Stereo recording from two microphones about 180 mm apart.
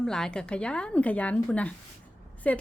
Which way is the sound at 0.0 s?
5° left (ahead or behind).